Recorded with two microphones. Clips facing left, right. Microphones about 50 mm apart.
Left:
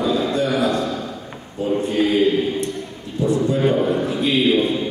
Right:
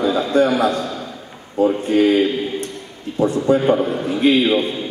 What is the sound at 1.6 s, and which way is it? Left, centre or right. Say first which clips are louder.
A man's voice: right 4 dB; right.